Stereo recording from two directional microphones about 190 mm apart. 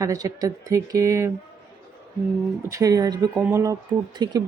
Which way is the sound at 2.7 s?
15° right (ahead or behind).